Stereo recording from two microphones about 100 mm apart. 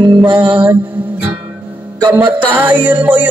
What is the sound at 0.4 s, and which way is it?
Music, 15° right (ahead or behind).